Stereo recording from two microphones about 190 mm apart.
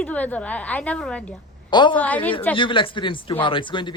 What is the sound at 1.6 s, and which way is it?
Speech, 25° left (ahead or behind).